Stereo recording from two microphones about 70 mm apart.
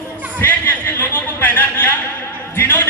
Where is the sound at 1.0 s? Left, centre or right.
Left.